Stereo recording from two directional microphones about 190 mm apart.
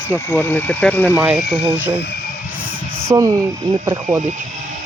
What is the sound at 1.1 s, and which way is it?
Speech, 5° right (ahead or behind).